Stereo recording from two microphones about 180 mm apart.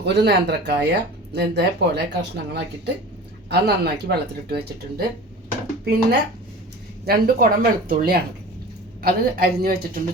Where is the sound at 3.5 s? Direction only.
60° right (ahead or behind).